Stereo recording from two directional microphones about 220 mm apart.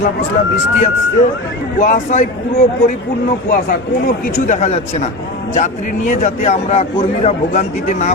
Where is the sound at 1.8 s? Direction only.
35° left (ahead or behind).